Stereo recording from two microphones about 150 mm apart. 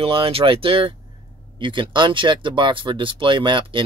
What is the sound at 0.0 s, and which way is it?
Speech, 40° right (ahead or behind).